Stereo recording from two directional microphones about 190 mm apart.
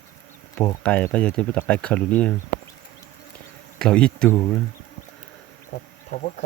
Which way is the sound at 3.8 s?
5° left (ahead or behind).